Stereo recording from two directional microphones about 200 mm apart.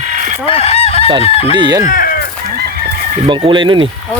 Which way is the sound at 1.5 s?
20° right (ahead or behind).